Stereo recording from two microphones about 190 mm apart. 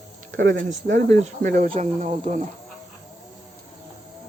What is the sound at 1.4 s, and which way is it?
Speech, 45° right (ahead or behind).